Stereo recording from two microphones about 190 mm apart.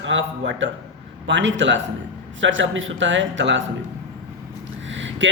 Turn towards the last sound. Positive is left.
turn(degrees=-80)